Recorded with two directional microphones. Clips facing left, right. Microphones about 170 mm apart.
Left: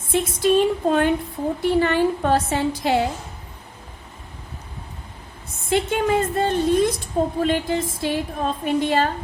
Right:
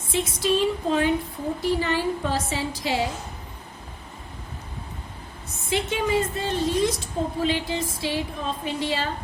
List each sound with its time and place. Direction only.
0.1 s a woman's voice: 55° left (ahead or behind)
5.7 s a woman's voice: 55° left (ahead or behind)